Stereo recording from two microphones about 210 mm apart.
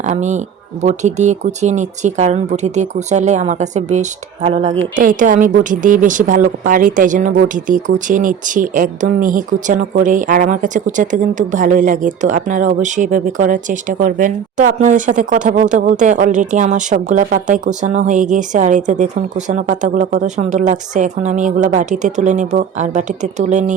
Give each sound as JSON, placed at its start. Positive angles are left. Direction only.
{"t": 0.0, "sound": "speech", "side_deg": -35}